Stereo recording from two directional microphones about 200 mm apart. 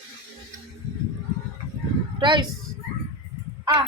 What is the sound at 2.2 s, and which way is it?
Speech, 25° right (ahead or behind).